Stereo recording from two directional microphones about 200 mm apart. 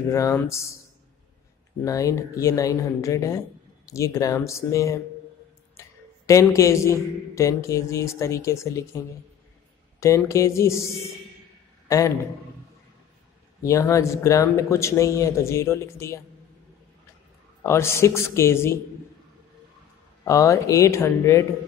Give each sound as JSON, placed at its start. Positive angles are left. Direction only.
{"t": 0.1, "sound": "speech", "side_deg": 15}
{"t": 1.9, "sound": "a man's voice", "side_deg": 15}
{"t": 13.6, "sound": "speech", "side_deg": 15}
{"t": 17.6, "sound": "speech", "side_deg": 15}
{"t": 20.2, "sound": "speech", "side_deg": 15}